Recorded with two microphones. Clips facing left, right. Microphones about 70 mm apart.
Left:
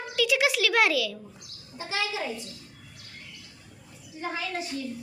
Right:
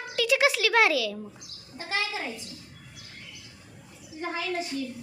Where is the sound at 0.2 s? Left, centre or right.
Right.